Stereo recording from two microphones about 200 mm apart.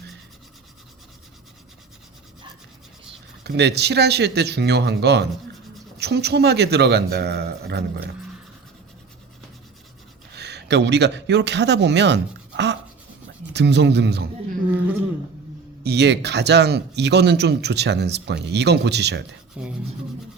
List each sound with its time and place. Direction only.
3.4 s speech: 55° right (ahead or behind)
10.3 s a man's voice: 55° right (ahead or behind)
15.8 s speech: 55° right (ahead or behind)